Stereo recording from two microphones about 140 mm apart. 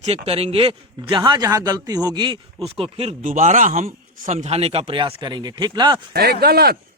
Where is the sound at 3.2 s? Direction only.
65° right (ahead or behind); by 6.0 s 30° right (ahead or behind).